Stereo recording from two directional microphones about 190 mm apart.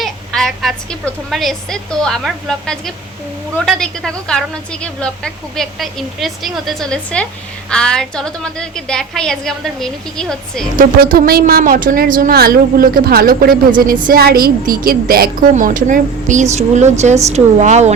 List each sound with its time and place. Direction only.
0.0 s a woman's voice: centre (ahead or behind)
10.8 s a woman's voice: 50° right (ahead or behind)